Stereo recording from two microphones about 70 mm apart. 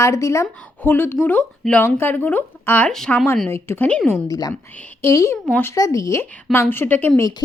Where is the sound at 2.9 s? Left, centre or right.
Centre.